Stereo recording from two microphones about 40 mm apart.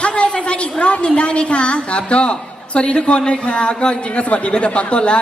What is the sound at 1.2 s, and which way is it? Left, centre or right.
A woman's voice, left.